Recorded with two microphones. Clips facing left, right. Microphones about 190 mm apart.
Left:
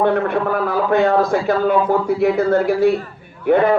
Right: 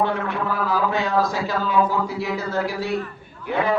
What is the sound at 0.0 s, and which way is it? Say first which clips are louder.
A man's voice: left 7 dB; 60° left (ahead or behind).